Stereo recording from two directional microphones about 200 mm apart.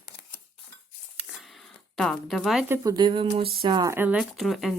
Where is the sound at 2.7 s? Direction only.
20° right (ahead or behind); by 4.7 s centre (ahead or behind).